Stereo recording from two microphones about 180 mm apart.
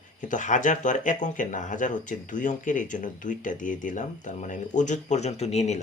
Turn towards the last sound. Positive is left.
turn(degrees=40)  # may be behind; listen again after turning